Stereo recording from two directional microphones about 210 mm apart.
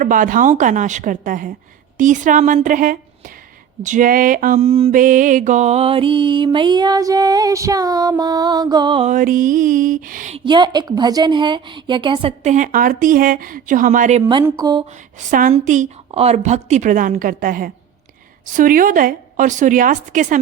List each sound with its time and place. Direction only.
0.0 s speech: 40° right (ahead or behind)
4.6 s music: 30° right (ahead or behind)
4.9 s music: 40° right (ahead or behind); by 9.0 s 20° right (ahead or behind)
9.0 s speech: 40° right (ahead or behind)
14.4 s music: 20° right (ahead or behind)
15.3 s speech: 40° right (ahead or behind)